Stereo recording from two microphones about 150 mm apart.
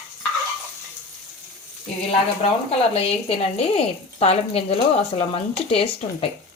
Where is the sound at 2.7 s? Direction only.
40° left (ahead or behind).